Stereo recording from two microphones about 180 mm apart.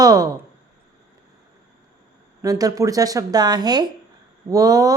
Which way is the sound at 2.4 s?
20° right (ahead or behind).